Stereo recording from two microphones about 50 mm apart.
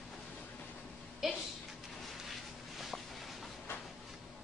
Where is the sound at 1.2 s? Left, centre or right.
Centre.